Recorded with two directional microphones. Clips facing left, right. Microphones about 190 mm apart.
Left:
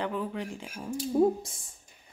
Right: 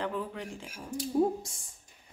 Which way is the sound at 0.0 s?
5° left (ahead or behind).